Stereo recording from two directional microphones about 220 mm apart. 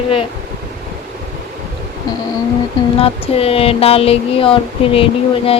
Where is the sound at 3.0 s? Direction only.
25° left (ahead or behind).